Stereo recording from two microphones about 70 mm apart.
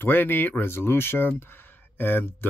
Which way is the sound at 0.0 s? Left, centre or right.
Left.